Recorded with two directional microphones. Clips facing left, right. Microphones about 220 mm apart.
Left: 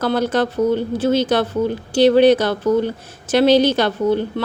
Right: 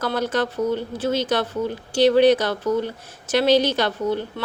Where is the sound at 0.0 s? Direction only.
30° left (ahead or behind).